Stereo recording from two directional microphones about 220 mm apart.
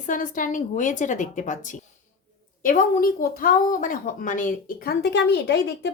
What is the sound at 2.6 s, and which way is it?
A woman's voice, 40° left (ahead or behind).